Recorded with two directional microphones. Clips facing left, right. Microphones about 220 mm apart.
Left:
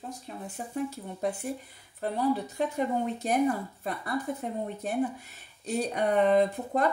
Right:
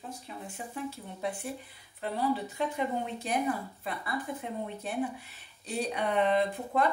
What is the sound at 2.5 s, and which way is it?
Speech, 45° left (ahead or behind).